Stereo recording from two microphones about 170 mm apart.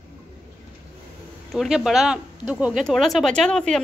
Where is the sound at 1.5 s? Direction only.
Centre (ahead or behind).